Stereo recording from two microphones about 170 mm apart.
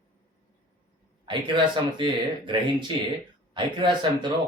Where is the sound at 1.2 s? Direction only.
30° right (ahead or behind).